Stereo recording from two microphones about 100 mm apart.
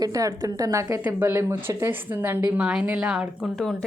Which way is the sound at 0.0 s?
35° right (ahead or behind).